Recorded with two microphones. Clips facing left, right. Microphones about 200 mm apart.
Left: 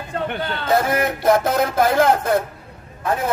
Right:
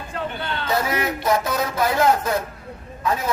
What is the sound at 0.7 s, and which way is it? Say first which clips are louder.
Speech: left 5 dB; 50° left (ahead or behind).